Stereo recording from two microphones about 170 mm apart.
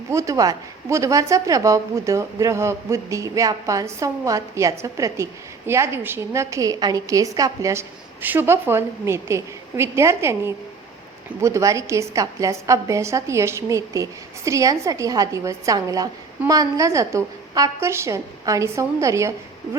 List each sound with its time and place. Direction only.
0.1 s a woman's voice: 20° right (ahead or behind)